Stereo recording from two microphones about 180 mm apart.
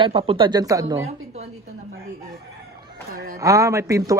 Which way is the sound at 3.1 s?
55° right (ahead or behind).